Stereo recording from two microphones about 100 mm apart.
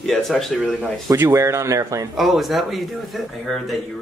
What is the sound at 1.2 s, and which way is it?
Speech, 25° right (ahead or behind).